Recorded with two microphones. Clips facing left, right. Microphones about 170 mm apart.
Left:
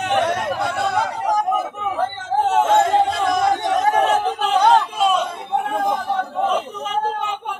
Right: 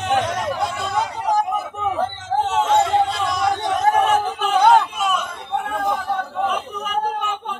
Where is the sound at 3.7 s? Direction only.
40° left (ahead or behind).